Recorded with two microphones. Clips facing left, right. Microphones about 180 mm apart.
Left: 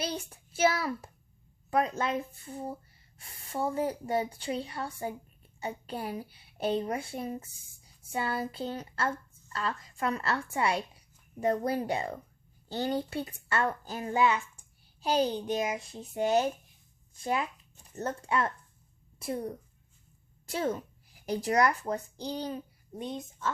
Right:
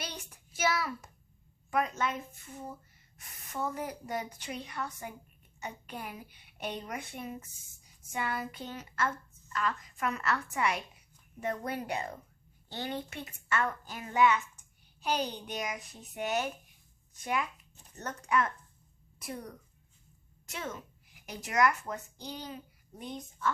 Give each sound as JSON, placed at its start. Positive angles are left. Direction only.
{"t": 0.0, "sound": "a child's voice", "side_deg": 30}